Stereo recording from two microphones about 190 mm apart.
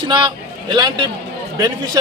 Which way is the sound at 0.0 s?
25° right (ahead or behind).